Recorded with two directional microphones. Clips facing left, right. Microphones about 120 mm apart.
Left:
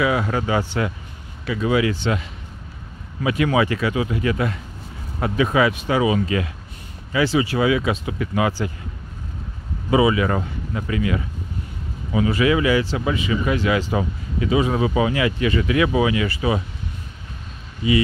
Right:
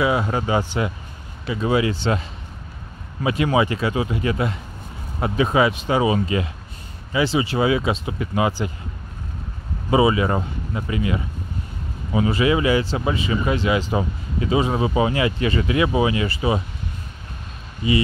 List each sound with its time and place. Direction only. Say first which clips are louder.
0.0 s speech: even; 25° right (ahead or behind)
1.4 s speech: even; 30° right (ahead or behind)
9.8 s speech: even; 30° right (ahead or behind)